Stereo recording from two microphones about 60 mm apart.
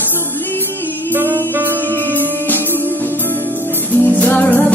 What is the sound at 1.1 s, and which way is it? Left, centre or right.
Music, right.